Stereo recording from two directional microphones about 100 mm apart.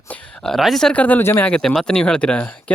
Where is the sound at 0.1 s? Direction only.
5° left (ahead or behind); by 1.5 s 20° left (ahead or behind).